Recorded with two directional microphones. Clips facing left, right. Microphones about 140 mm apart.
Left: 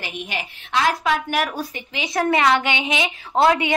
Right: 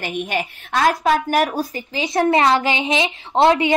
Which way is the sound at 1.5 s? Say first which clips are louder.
Right 5 dB; 30° right (ahead or behind).